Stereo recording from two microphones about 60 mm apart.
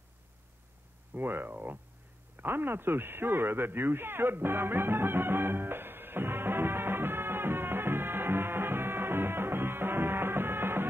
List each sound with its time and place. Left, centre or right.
1.1 s speech: right
2.4 s radio: right